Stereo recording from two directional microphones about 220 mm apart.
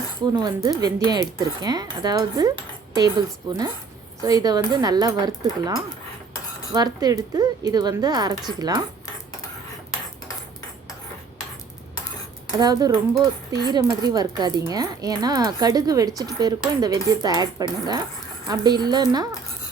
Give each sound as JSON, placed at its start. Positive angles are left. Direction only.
{"t": 0.4, "sound": "speech", "side_deg": -15}
{"t": 12.5, "sound": "speech", "side_deg": -15}